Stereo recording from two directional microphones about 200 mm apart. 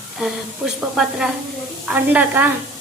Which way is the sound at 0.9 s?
5° right (ahead or behind).